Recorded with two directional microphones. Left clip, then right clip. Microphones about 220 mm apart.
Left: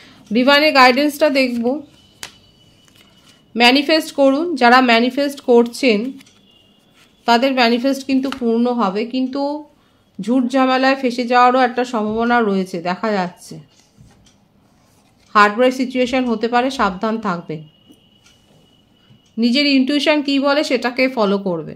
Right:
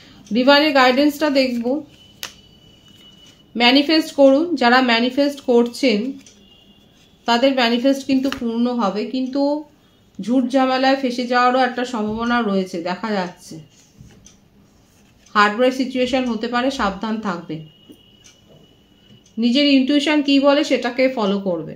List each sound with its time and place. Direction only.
0.0 s speech: 50° left (ahead or behind)
3.5 s speech: 50° left (ahead or behind)
7.2 s speech: 50° left (ahead or behind)
15.3 s speech: 50° left (ahead or behind)
19.3 s speech: 45° left (ahead or behind)